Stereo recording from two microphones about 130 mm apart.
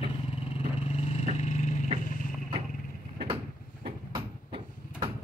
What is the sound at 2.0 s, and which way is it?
Vehicle, 85° left.